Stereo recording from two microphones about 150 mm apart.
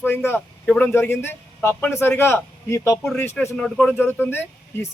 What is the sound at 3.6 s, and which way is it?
Speech, 5° left (ahead or behind).